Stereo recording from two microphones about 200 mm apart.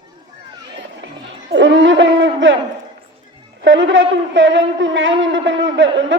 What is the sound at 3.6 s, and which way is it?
A man's voice, 70° right (ahead or behind).